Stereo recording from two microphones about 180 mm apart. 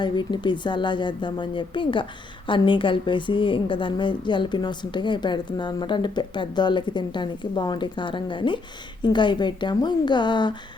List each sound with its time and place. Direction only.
0.0 s a woman's voice: 25° left (ahead or behind)